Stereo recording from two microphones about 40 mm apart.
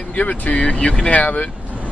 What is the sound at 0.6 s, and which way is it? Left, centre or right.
Speech, left.